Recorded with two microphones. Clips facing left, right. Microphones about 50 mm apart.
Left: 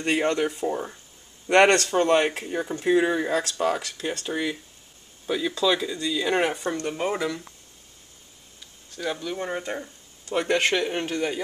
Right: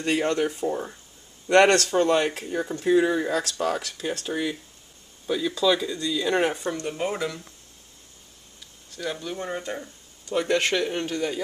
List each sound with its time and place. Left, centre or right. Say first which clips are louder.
0.0 s speech: even; left
0.5 s speech: even; centre
1.5 s speech: even; centre
8.9 s speech: left 2 dB; centre